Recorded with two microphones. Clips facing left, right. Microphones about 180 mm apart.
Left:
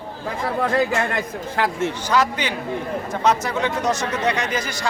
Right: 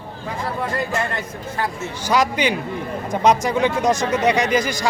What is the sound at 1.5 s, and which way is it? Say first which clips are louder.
Speech: left 4 dB; 90° left.